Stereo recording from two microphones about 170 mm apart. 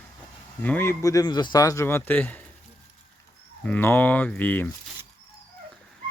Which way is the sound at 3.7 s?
10° left (ahead or behind).